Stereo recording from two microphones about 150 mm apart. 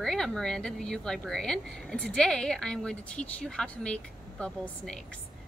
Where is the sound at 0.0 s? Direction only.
5° left (ahead or behind).